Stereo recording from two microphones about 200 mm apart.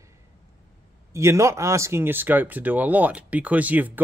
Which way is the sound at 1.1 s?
15° right (ahead or behind).